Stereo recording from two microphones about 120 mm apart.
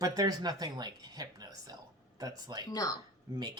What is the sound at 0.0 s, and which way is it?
Speech, 30° right (ahead or behind).